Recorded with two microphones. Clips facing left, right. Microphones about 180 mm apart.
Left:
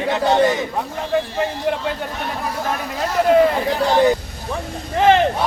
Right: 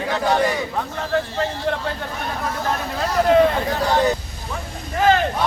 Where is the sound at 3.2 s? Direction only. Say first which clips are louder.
Left 1 dB; 5° left (ahead or behind).